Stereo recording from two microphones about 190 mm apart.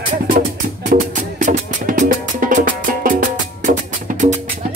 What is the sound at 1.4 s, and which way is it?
Music, 45° right (ahead or behind).